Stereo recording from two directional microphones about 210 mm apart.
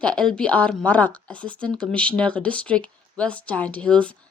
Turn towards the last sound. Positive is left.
turn(degrees=5)  # may be behind; listen again after turning